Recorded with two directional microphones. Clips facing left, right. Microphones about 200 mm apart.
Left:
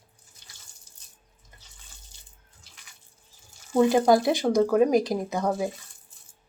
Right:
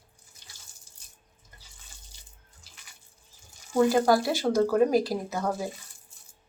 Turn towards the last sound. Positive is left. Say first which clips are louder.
# left 3 dB
turn(degrees=15)  # may be behind; listen again after turning